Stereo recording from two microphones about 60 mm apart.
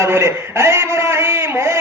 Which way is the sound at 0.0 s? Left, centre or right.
Right.